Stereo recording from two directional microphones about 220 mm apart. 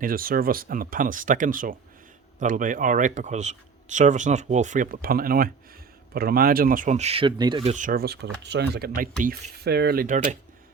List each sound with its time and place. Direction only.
0.0 s speech: 40° right (ahead or behind)